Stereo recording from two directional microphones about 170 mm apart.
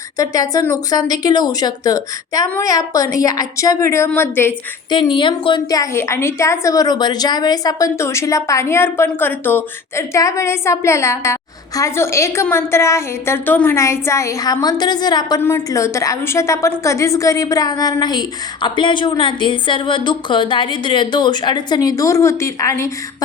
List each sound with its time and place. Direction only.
0.2 s a woman's voice: 20° left (ahead or behind)
5.1 s a woman's voice: 25° left (ahead or behind)
15.4 s a woman's voice: 15° left (ahead or behind)